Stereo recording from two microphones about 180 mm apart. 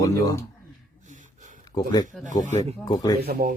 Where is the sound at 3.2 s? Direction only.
55° right (ahead or behind).